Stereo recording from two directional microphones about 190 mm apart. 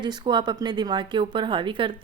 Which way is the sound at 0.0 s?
25° right (ahead or behind).